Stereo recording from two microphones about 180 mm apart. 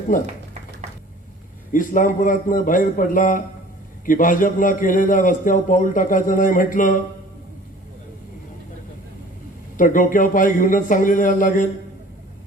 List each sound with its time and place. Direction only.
1.7 s a man's voice: 50° left (ahead or behind)
9.7 s a man's voice: 50° left (ahead or behind)